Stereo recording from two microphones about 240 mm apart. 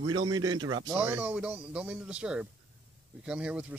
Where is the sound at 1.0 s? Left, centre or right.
Centre.